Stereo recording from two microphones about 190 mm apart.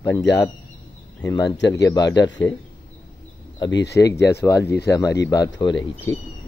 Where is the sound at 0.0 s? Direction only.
15° left (ahead or behind).